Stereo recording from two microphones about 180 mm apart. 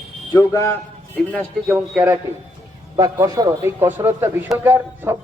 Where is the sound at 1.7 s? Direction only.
10° right (ahead or behind).